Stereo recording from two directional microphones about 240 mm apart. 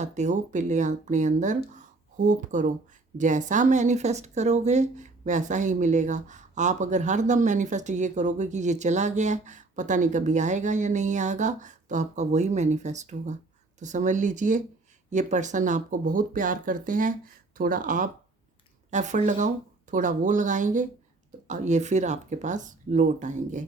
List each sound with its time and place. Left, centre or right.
0.0 s speech: right